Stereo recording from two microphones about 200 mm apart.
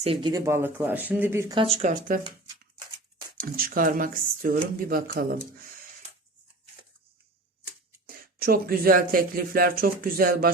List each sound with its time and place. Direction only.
0.0 s speech: 25° right (ahead or behind)
1.5 s speech: 30° right (ahead or behind)
3.4 s speech: 45° right (ahead or behind)
8.0 s speech: 50° right (ahead or behind)